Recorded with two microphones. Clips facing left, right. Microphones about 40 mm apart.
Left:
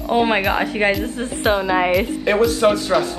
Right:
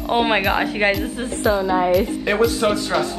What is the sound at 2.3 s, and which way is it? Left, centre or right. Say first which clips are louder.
Speech: left 3 dB; centre.